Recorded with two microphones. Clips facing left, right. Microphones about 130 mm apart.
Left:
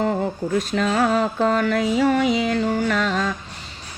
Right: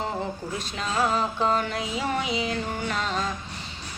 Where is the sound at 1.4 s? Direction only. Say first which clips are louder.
Left 6 dB; 50° left (ahead or behind).